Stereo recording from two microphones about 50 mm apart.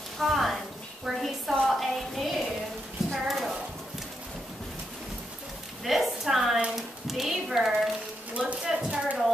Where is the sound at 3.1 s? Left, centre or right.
Centre.